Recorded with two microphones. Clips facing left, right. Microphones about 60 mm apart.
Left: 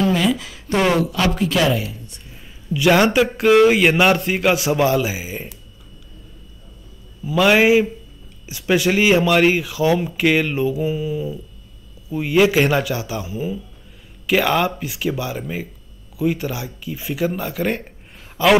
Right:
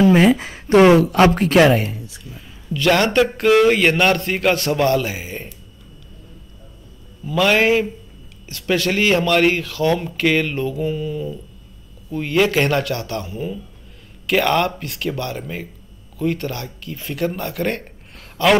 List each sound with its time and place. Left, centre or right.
0.0 s a sound: right
0.9 s speech: right
2.7 s speech: centre
7.2 s speech: centre